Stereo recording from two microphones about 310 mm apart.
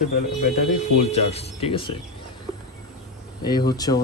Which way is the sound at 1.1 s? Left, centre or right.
Centre.